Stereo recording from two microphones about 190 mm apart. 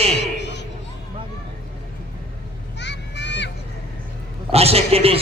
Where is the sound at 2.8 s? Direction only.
65° left (ahead or behind).